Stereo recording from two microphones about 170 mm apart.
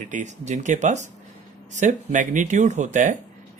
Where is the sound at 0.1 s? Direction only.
45° right (ahead or behind).